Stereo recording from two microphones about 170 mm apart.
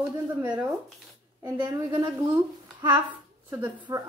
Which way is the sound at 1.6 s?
20° right (ahead or behind).